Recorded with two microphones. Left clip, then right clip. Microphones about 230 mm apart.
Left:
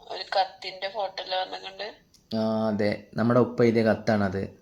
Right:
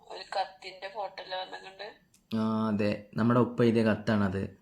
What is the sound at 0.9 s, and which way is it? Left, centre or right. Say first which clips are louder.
Speech: left 6 dB; left.